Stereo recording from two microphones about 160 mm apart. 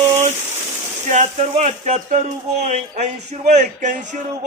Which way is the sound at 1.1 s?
45° right (ahead or behind).